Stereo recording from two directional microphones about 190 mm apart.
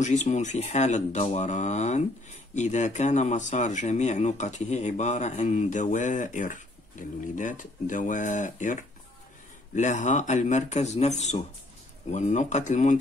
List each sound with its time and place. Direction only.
0.0 s speech: 40° left (ahead or behind)
9.8 s speech: 40° left (ahead or behind)